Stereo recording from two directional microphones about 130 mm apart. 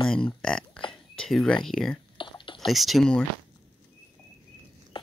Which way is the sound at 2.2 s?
40° left (ahead or behind).